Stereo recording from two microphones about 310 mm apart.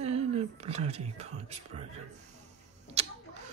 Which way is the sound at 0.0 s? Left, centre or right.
Centre.